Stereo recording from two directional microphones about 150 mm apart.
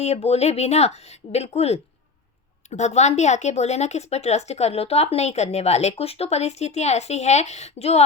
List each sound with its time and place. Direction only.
0.0 s a woman's voice: 45° left (ahead or behind)